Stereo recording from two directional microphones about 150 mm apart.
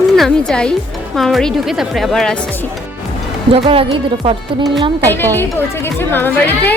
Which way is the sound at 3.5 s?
40° right (ahead or behind).